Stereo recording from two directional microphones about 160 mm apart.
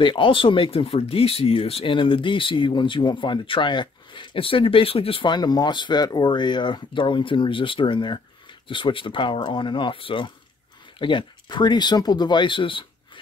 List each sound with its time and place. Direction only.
0.0 s speech: 30° left (ahead or behind)